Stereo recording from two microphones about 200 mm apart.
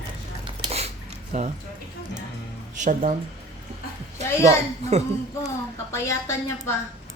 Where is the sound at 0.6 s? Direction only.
30° right (ahead or behind).